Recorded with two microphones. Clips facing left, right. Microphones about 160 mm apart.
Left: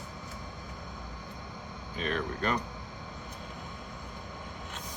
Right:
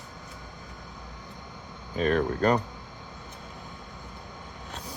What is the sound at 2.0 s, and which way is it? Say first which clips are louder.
Speech: right 8 dB; 40° right (ahead or behind).